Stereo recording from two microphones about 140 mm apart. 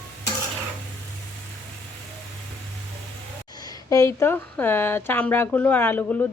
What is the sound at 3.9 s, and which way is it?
Speech, 20° left (ahead or behind).